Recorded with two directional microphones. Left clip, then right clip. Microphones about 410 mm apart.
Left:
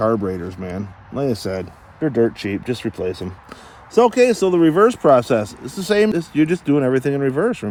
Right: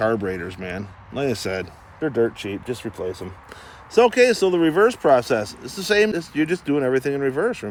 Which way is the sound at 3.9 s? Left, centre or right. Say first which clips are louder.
Left 2 dB; centre.